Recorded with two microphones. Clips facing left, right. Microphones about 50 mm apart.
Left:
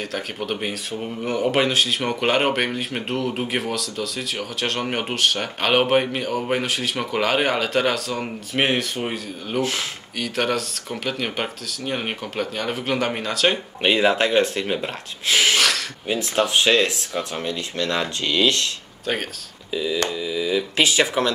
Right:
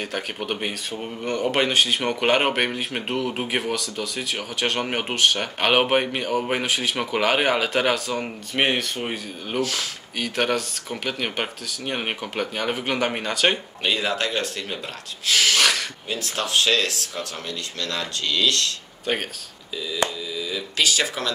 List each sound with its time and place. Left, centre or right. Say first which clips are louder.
0.0 s speech: left 1 dB; centre
9.6 s speech: left 2 dB; left
10.1 s speech: even; centre
13.8 s speech: left 6 dB; left
19.7 s speech: left 3 dB; left